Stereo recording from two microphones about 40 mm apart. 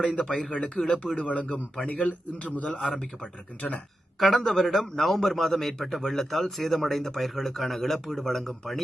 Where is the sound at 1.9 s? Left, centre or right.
Left.